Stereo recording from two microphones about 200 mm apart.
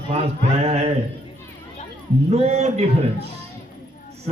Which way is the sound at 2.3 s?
30° right (ahead or behind).